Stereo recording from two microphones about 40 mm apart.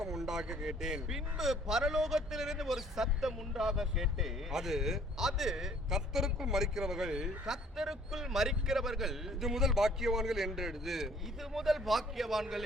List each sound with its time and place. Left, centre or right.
0.0 s a man's voice: centre